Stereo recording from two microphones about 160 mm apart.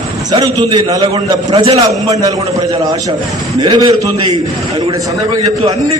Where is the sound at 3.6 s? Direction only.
30° right (ahead or behind).